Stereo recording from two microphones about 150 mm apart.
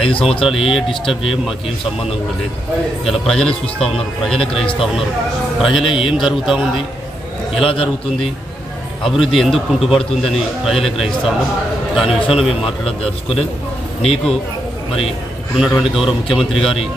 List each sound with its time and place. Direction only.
0.1 s a man's voice: 40° left (ahead or behind)
0.5 s a man's voice: centre (ahead or behind)
3.1 s a man's voice: 5° left (ahead or behind)
5.9 s a man's voice: 35° left (ahead or behind)
6.1 s a man's voice: centre (ahead or behind)
7.6 s a man's voice: 35° left (ahead or behind)
9.0 s a man's voice: centre (ahead or behind)
13.0 s a man's voice: 40° left (ahead or behind)
15.5 s a man's voice: 5° right (ahead or behind)